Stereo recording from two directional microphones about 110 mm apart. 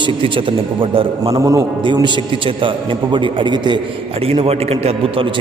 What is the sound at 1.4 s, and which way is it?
Speech, 30° right (ahead or behind).